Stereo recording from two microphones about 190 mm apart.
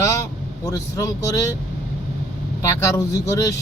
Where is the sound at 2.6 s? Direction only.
15° left (ahead or behind).